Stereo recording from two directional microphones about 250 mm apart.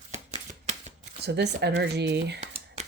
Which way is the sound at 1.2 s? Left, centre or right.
Right.